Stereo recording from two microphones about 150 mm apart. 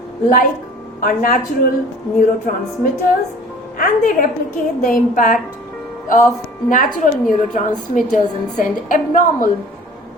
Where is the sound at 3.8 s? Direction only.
60° left (ahead or behind).